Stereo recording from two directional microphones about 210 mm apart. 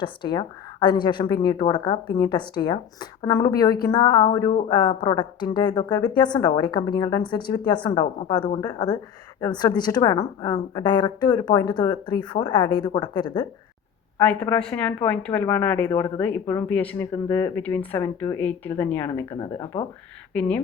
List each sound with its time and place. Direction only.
0.0 s a woman's voice: 20° left (ahead or behind)
14.2 s speech: 10° left (ahead or behind)